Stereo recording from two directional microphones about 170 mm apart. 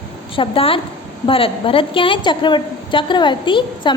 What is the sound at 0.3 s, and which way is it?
A woman's voice, 30° left (ahead or behind).